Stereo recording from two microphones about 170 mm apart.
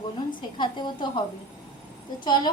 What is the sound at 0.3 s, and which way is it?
Speech, 30° left (ahead or behind).